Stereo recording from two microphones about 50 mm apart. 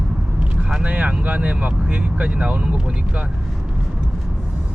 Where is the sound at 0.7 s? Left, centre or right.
Centre.